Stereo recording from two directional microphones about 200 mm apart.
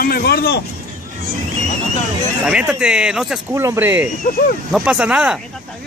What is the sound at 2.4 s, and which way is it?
Speech, 5° right (ahead or behind).